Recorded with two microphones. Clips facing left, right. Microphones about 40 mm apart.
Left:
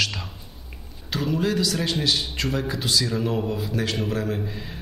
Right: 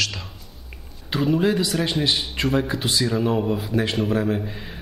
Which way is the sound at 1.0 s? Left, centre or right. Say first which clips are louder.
Right 4 dB; centre.